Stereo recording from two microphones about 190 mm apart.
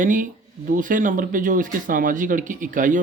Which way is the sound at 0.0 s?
45° right (ahead or behind).